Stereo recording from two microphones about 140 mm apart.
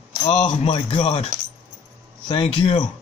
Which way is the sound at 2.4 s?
50° left (ahead or behind).